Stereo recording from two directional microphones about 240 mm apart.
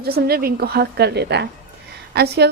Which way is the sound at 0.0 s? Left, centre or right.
Right.